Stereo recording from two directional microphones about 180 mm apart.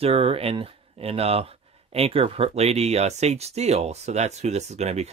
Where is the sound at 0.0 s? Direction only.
30° right (ahead or behind).